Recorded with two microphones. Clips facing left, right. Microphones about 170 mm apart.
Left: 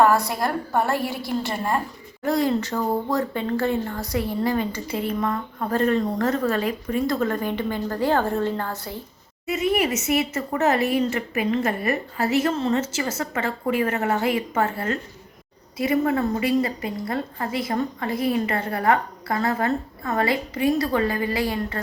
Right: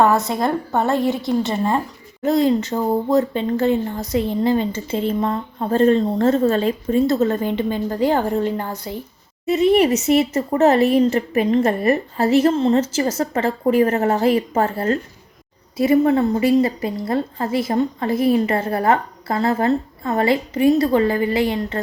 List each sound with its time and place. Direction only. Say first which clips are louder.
0.0 s speech: right 2 dB; 20° right (ahead or behind)
9.5 s speech: right 7 dB; 30° right (ahead or behind)